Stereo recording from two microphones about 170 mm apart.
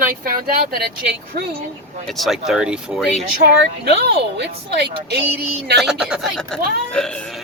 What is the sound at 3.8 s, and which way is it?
Speech, 70° right (ahead or behind).